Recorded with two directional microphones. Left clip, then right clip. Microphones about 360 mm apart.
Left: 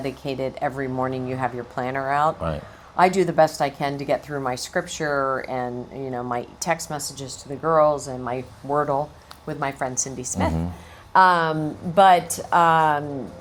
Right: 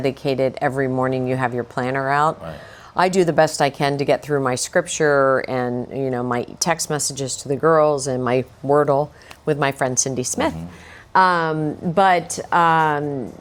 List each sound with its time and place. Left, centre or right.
0.0 s speech: right
9.5 s a woman's voice: right
11.1 s a woman's voice: right